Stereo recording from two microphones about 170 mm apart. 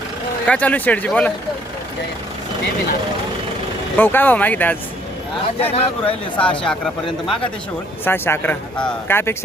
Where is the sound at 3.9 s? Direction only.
10° left (ahead or behind).